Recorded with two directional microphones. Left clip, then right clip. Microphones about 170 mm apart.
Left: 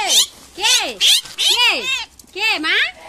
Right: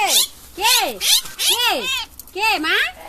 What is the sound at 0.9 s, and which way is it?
Speech, 30° left (ahead or behind).